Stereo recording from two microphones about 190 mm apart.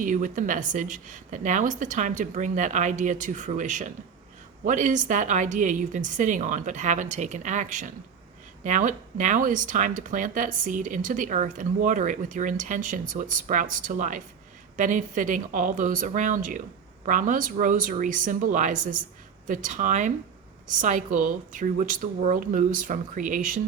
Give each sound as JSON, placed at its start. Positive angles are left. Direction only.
{"t": 0.0, "sound": "a woman's voice", "side_deg": -45}